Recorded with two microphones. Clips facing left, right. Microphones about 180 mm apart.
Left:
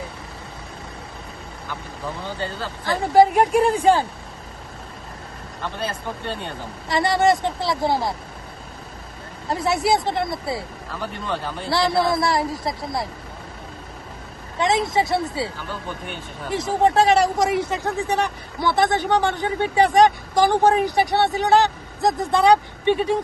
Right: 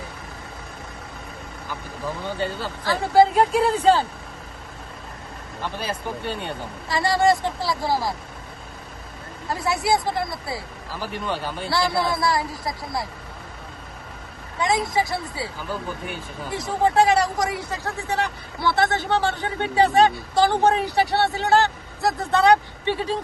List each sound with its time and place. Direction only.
2.8 s speech: 15° left (ahead or behind)
6.8 s speech: 20° left (ahead or behind)
9.5 s speech: 20° left (ahead or behind)
11.0 s speech: 5° right (ahead or behind)
11.7 s speech: 20° left (ahead or behind)
14.6 s speech: 25° left (ahead or behind)
16.6 s speech: 25° left (ahead or behind)